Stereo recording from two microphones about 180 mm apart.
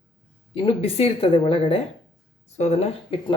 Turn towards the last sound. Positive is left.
turn(degrees=35)  # may be behind; listen again after turning